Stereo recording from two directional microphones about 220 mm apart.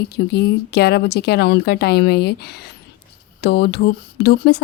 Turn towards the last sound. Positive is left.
turn(degrees=50)  # may be behind; listen again after turning